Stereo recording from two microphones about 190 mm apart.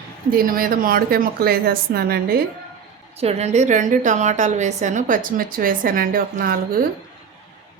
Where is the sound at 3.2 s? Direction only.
35° right (ahead or behind); by 6.5 s 50° right (ahead or behind).